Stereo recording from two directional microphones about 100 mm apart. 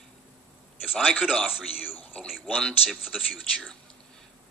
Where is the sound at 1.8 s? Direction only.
15° left (ahead or behind).